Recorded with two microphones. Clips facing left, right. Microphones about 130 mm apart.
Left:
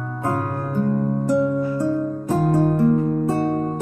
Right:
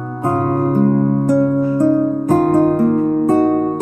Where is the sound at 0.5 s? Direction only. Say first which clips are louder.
Right 8 dB; 50° right (ahead or behind).